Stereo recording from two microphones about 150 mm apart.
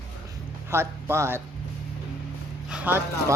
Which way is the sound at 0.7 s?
15° right (ahead or behind).